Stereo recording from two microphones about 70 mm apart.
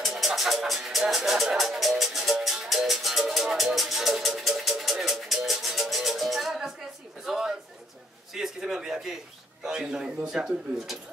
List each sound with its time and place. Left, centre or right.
0.0 s music: centre
7.2 s a sound: centre
8.3 s a man's voice: centre